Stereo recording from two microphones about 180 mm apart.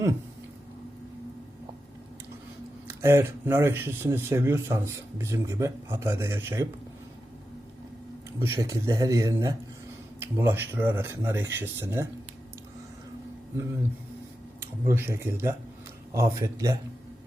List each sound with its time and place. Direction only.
2.8 s speech: 15° right (ahead or behind)
8.4 s speech: 15° right (ahead or behind)
14.6 s speech: 15° right (ahead or behind)